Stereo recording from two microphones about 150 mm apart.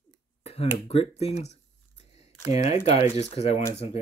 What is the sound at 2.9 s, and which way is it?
Speech, 45° left (ahead or behind).